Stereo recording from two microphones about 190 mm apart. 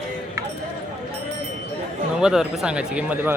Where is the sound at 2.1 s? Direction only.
5° right (ahead or behind).